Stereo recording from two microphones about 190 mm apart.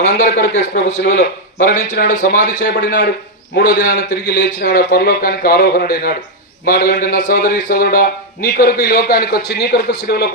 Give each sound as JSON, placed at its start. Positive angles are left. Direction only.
{"t": 0.3, "sound": "a man's voice", "side_deg": 55}